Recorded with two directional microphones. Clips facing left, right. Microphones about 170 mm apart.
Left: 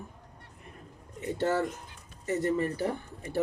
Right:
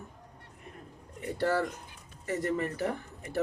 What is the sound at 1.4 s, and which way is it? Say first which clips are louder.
Speech: even; 25° left (ahead or behind).